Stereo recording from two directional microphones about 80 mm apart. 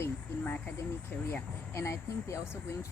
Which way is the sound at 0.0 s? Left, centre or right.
Left.